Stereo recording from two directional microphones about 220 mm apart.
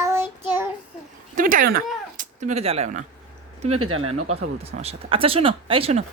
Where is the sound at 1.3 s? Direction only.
40° right (ahead or behind).